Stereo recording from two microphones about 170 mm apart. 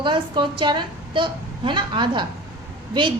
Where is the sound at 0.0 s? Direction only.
25° right (ahead or behind).